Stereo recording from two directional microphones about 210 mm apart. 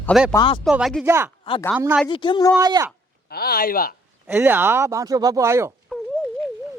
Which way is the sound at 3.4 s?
45° left (ahead or behind).